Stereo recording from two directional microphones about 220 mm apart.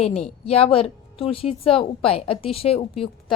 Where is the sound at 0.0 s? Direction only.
30° left (ahead or behind).